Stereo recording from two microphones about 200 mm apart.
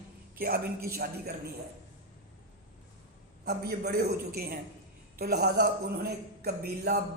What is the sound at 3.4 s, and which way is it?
Speech, 50° right (ahead or behind).